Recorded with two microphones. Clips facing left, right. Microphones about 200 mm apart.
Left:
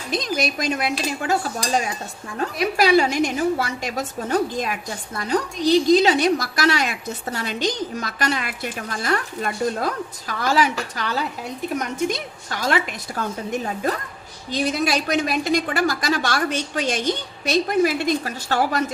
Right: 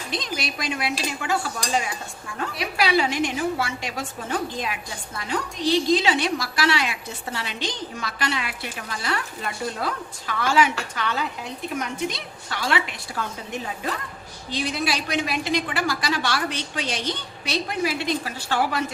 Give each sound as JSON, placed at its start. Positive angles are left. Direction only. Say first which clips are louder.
{"t": 0.1, "sound": "a woman's voice", "louder": "left 7 dB", "side_deg": 45}
{"t": 1.2, "sound": "stir", "louder": "left 4 dB", "side_deg": 40}
{"t": 2.4, "sound": "a woman's voice", "louder": "left 5 dB", "side_deg": 45}
{"t": 10.9, "sound": "stir", "louder": "left 1 dB", "side_deg": 40}
{"t": 11.7, "sound": "a woman's voice", "louder": "left 4 dB", "side_deg": 45}